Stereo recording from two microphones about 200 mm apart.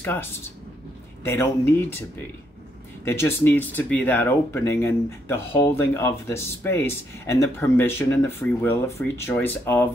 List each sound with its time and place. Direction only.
0.0 s speech: 10° left (ahead or behind)
3.1 s speech: 10° left (ahead or behind)